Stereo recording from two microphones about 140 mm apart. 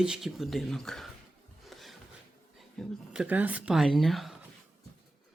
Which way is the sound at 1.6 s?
Centre (ahead or behind).